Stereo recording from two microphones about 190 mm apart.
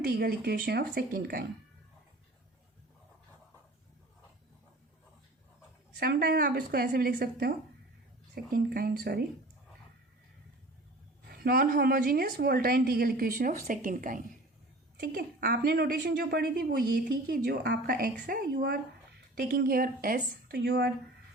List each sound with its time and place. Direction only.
0.0 s a woman's voice: 55° right (ahead or behind)
6.0 s a woman's voice: 55° right (ahead or behind)
8.5 s a woman's voice: 50° right (ahead or behind)
11.3 s a woman's voice: 50° right (ahead or behind)